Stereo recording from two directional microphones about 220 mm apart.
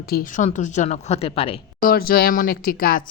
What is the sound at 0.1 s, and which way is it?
Speech, 40° left (ahead or behind).